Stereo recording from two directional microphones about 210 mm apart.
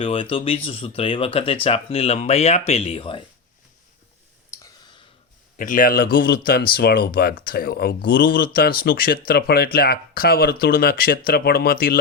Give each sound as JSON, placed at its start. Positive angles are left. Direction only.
{"t": 0.0, "sound": "speech", "side_deg": 25}
{"t": 5.5, "sound": "speech", "side_deg": 40}